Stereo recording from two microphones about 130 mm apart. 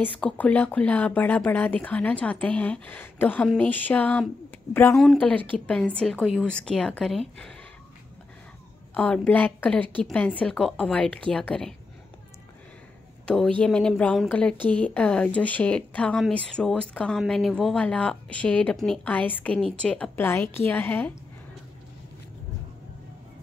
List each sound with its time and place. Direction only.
0.0 s speech: 10° left (ahead or behind)
4.9 s speech: centre (ahead or behind)
5.2 s speech: 15° left (ahead or behind)
8.9 s speech: 10° left (ahead or behind)
13.2 s speech: 5° left (ahead or behind)